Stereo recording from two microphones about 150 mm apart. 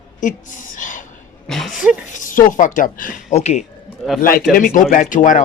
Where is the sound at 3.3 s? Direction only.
50° left (ahead or behind).